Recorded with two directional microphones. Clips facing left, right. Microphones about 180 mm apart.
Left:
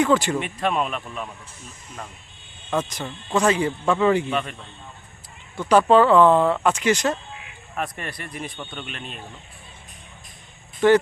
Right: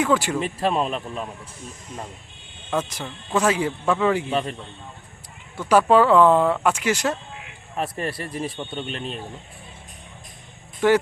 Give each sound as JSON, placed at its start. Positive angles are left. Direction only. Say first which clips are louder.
{"t": 0.0, "sound": "speech", "louder": "left 2 dB", "side_deg": -5}
{"t": 0.3, "sound": "speech", "louder": "right 1 dB", "side_deg": -30}
{"t": 2.6, "sound": "a man's voice", "louder": "left 1 dB", "side_deg": -5}
{"t": 4.3, "sound": "speech", "louder": "right 2 dB", "side_deg": -30}
{"t": 5.5, "sound": "speech", "louder": "left 1 dB", "side_deg": -10}
{"t": 7.8, "sound": "speech", "louder": "right 3 dB", "side_deg": -30}
{"t": 10.8, "sound": "speech", "louder": "left 2 dB", "side_deg": -10}